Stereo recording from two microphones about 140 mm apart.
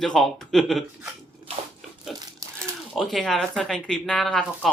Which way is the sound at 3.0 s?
Centre (ahead or behind).